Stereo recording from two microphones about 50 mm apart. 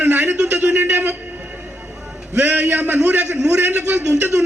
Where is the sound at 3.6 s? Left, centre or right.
Right.